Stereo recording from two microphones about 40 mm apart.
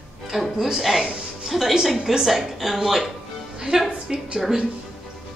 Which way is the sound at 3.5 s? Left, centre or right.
Centre.